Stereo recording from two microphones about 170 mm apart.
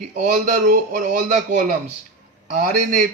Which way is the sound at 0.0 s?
45° right (ahead or behind).